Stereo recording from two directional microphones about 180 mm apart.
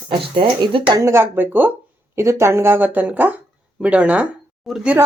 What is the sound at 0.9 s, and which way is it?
Speech, 15° right (ahead or behind).